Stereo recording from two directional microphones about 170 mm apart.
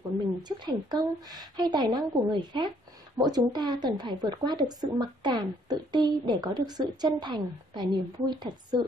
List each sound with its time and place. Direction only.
0.4 s speech: 25° right (ahead or behind)